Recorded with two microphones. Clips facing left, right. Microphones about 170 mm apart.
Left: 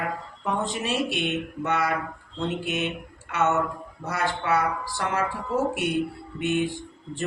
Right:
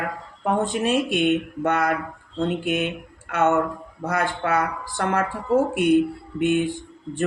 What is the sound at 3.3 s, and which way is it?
Speech, 55° right (ahead or behind).